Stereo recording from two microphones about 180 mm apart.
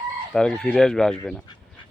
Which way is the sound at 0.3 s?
5° left (ahead or behind).